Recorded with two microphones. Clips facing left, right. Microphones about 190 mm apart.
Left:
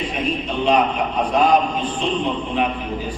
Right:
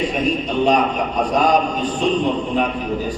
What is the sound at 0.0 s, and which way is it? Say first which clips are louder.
A man's voice: right 4 dB; 40° right (ahead or behind).